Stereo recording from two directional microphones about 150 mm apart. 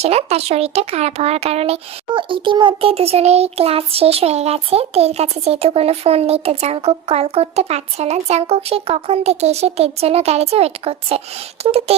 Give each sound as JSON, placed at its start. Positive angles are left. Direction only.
{"t": 0.0, "sound": "speech", "side_deg": -45}